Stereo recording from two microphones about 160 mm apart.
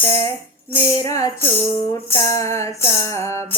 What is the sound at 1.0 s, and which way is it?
Music, 20° left (ahead or behind).